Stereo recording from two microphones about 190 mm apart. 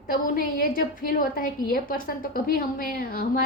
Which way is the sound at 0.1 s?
50° left (ahead or behind).